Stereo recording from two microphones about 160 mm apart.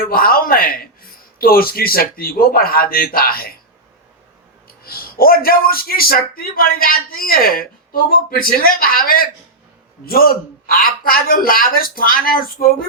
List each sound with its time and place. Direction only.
0.0 s a man's voice: 65° left (ahead or behind)
4.8 s a man's voice: 70° left (ahead or behind)